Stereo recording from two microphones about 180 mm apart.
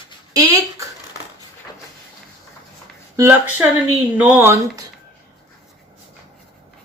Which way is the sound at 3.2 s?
15° right (ahead or behind).